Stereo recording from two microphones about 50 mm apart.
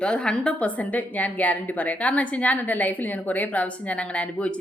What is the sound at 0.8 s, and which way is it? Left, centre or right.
A woman's voice, left.